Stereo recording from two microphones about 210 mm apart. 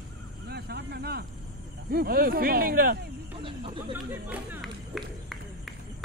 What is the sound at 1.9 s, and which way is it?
Speech, 45° right (ahead or behind).